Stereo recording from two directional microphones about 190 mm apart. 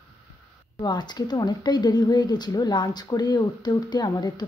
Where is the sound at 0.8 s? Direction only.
20° left (ahead or behind).